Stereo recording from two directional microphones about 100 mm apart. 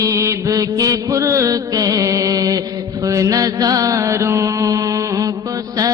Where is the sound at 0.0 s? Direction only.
30° right (ahead or behind).